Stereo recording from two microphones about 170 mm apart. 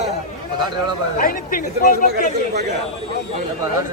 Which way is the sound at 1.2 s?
55° left (ahead or behind).